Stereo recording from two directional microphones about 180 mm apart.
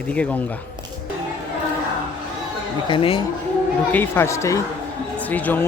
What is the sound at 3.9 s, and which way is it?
Speech, 10° left (ahead or behind).